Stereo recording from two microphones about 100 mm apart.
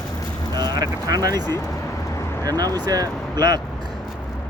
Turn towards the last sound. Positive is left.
turn(degrees=-40)  # may be behind; listen again after turning